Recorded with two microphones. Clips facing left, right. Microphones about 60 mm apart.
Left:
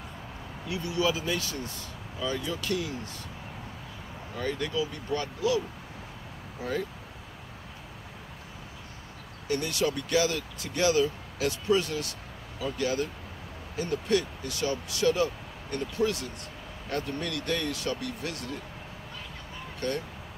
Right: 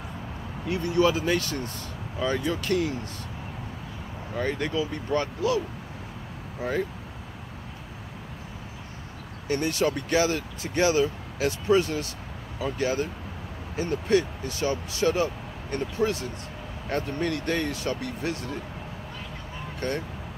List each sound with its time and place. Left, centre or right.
0.7 s speech: right
4.4 s speech: right
6.6 s speech: right
9.5 s speech: right
19.8 s speech: right